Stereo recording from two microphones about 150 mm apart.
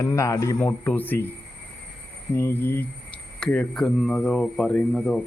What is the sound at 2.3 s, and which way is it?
Speech, 15° left (ahead or behind).